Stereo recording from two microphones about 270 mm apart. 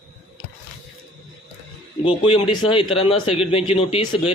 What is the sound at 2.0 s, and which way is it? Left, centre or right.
A man's voice, centre.